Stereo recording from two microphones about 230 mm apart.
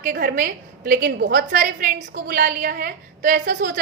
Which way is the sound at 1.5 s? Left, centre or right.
Right.